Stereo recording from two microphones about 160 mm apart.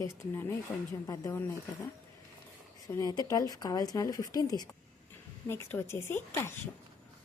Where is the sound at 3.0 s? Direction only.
25° left (ahead or behind).